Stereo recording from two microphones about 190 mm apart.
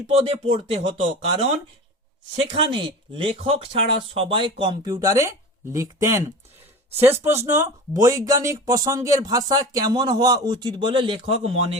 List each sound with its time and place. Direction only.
0.1 s speech: 30° right (ahead or behind)
2.3 s speech: 30° right (ahead or behind)